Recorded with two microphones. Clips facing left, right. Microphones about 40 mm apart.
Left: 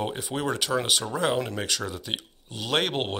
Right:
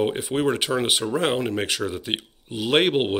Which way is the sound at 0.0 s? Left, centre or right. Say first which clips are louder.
Right 7 dB; right.